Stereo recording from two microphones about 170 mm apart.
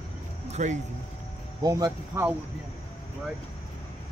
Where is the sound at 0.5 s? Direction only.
45° right (ahead or behind).